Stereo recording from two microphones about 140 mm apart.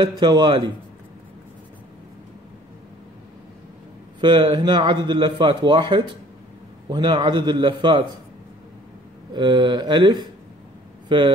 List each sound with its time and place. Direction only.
0.0 s a man's voice: 30° right (ahead or behind)
4.2 s a man's voice: 35° right (ahead or behind)
9.3 s a man's voice: 35° right (ahead or behind)